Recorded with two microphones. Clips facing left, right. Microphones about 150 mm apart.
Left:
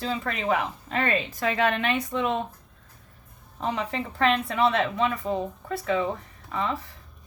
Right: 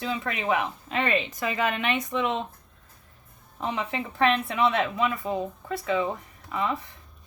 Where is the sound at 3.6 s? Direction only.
40° left (ahead or behind).